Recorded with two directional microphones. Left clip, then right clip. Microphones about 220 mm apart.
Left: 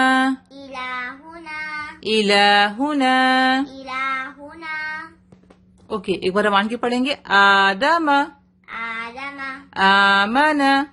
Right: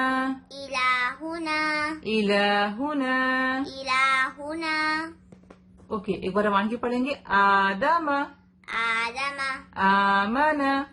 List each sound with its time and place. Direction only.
0.0 s child singing: 45° left (ahead or behind)
0.5 s child singing: 50° right (ahead or behind)
2.0 s a woman's voice: 45° left (ahead or behind)
3.8 s child singing: 50° right (ahead or behind)
5.9 s a woman's voice: 40° left (ahead or behind)
8.6 s child singing: 50° right (ahead or behind)
9.7 s mantra: 40° left (ahead or behind)